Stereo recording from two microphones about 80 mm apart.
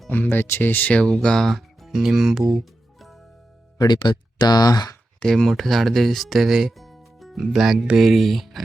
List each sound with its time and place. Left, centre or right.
0.1 s speech: left
1.0 s speech: centre
2.6 s music: centre
3.8 s speech: left
5.2 s speech: centre